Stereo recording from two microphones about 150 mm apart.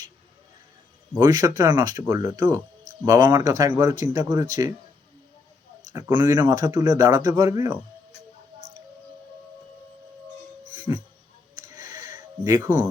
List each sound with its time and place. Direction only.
1.1 s speech: 20° right (ahead or behind)
3.3 s speech: 20° right (ahead or behind)
5.9 s speech: 20° right (ahead or behind)
11.5 s a sound: 20° right (ahead or behind)